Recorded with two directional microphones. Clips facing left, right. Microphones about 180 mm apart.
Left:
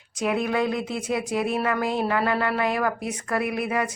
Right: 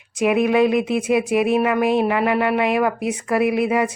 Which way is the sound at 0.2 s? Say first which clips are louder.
Right 8 dB; 20° right (ahead or behind).